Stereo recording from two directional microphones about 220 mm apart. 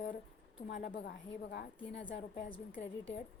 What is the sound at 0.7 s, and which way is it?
A woman's voice, 50° left (ahead or behind).